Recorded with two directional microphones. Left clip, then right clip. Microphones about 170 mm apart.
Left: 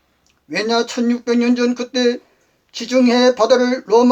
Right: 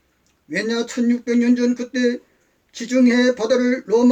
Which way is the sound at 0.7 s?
20° right (ahead or behind).